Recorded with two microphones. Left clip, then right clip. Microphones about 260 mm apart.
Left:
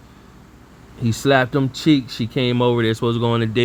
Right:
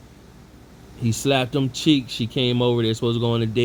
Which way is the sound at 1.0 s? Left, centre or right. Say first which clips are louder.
Left 5 dB; left.